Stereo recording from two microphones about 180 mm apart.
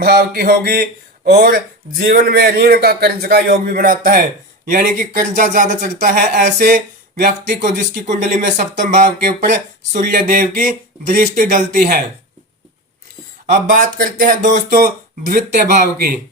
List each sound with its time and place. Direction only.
0.0 s a man's voice: 60° right (ahead or behind)
13.5 s speech: 45° right (ahead or behind)